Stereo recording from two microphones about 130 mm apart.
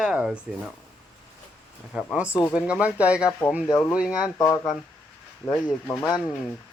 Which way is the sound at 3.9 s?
5° right (ahead or behind).